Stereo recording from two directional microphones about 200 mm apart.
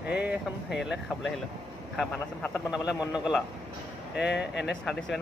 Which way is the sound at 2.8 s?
5° right (ahead or behind).